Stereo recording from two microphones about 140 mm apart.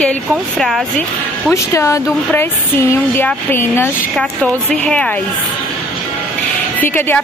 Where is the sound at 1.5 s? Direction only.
20° left (ahead or behind).